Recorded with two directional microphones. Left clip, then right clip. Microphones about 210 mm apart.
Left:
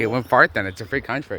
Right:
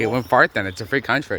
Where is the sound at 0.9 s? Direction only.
15° right (ahead or behind).